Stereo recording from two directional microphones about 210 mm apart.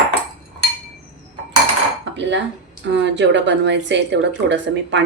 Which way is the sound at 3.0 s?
55° right (ahead or behind).